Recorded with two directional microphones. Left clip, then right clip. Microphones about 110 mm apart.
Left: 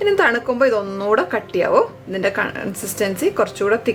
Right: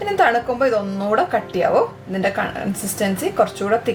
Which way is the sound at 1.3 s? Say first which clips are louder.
Right 1 dB; 45° left (ahead or behind).